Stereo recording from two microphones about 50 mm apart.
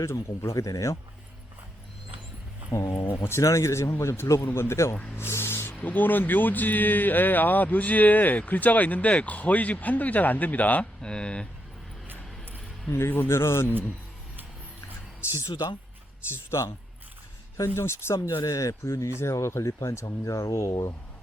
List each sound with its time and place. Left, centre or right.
0.0 s speech: left
2.7 s speech: left
4.3 s a man's voice: left
5.1 s a sound: left
5.8 s speech: left
11.0 s speech: centre
13.1 s speech: left
13.3 s a man's voice: left
15.4 s speech: left
16.3 s speech: left
17.7 s speech: left
19.2 s speech: left